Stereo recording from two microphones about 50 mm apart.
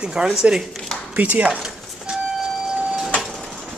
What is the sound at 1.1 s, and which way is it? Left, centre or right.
Speech, right.